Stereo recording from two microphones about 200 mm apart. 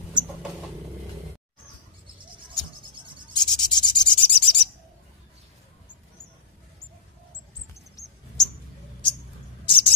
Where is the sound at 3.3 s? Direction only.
20° left (ahead or behind).